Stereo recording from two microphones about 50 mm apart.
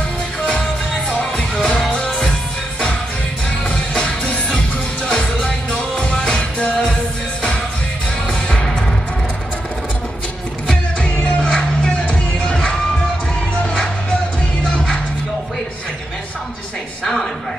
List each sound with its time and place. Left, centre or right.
3.6 s music: centre
8.3 s music: centre
10.7 s music: centre
17.0 s a sound: centre